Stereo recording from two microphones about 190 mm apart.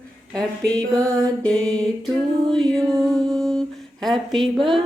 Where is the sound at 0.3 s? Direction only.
5° left (ahead or behind).